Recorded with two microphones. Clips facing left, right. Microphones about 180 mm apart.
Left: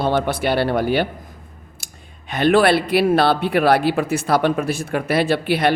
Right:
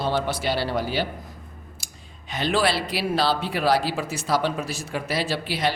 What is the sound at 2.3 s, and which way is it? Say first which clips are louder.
A man's voice: left 8 dB; 60° left (ahead or behind).